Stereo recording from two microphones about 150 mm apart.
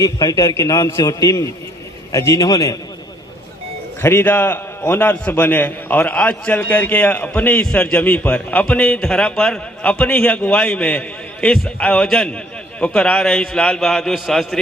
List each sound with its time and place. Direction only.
0.0 s a man's voice: 25° left (ahead or behind)
4.0 s a man's voice: 15° left (ahead or behind)